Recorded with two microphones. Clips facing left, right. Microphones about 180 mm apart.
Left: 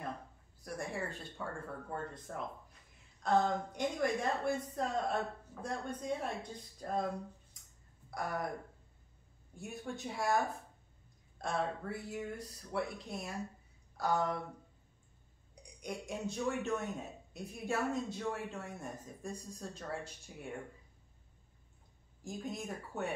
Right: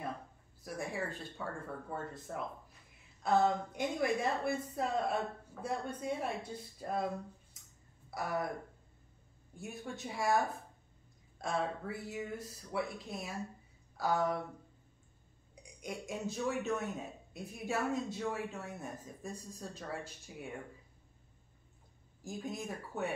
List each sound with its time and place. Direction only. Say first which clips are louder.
0.7 s a man's voice: right 1 dB; centre (ahead or behind)
8.1 s speech: right 2 dB; 5° right (ahead or behind)
9.6 s a man's voice: left 1 dB; centre (ahead or behind)
11.4 s a man's voice: even; centre (ahead or behind)
15.8 s a man's voice: even; centre (ahead or behind)
22.2 s a man's voice: right 1 dB; centre (ahead or behind)